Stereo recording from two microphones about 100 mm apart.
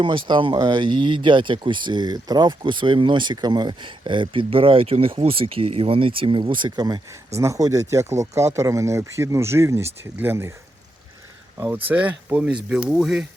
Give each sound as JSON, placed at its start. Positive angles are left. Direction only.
{"t": 0.0, "sound": "speech", "side_deg": -55}
{"t": 7.3, "sound": "speech", "side_deg": -30}
{"t": 11.7, "sound": "speech", "side_deg": -20}